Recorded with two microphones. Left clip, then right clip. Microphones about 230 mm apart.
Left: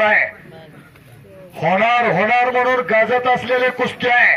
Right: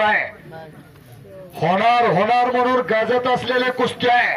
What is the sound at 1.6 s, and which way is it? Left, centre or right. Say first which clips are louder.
Speech: left 1 dB; right.